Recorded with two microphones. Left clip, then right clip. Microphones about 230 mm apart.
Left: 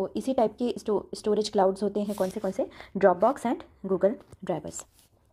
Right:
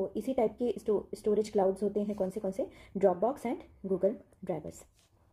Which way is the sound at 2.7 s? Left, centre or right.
Centre.